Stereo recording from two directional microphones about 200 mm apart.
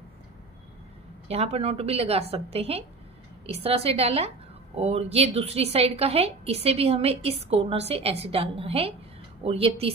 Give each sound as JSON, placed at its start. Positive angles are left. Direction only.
{"t": 1.3, "sound": "a woman's voice", "side_deg": -30}